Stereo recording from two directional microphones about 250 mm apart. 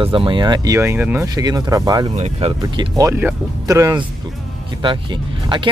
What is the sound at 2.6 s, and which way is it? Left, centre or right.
Speech, centre.